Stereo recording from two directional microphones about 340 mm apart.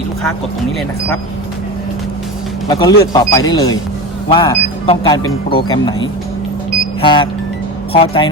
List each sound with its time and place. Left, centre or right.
2.6 s speech: centre
7.0 s speech: centre